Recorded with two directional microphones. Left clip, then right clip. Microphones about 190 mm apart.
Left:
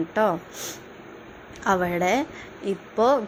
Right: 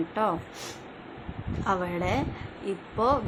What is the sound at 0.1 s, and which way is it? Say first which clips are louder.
Speech: left 6 dB; 15° left (ahead or behind).